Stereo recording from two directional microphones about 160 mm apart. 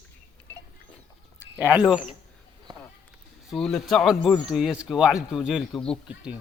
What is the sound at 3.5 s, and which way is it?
Speech, centre (ahead or behind).